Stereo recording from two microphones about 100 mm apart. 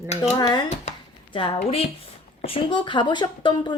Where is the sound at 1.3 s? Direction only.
60° left (ahead or behind).